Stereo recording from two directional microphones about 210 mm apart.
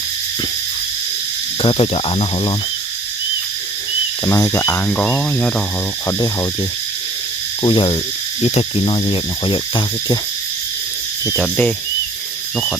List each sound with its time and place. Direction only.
1.6 s speech: 25° left (ahead or behind)
4.3 s cricket: 15° left (ahead or behind)
6.1 s cricket: 15° left (ahead or behind)
7.6 s speech: 20° left (ahead or behind)
11.3 s speech: 5° left (ahead or behind)